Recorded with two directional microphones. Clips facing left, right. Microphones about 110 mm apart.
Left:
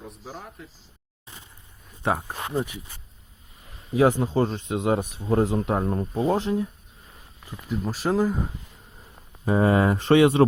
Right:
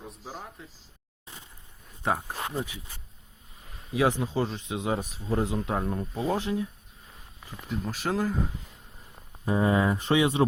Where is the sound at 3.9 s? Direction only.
40° left (ahead or behind).